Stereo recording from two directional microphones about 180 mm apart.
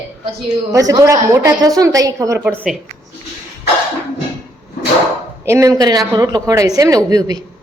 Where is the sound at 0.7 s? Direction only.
20° right (ahead or behind).